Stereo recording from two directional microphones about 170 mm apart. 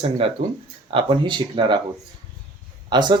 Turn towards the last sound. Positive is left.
turn(degrees=-25)  # may be behind; listen again after turning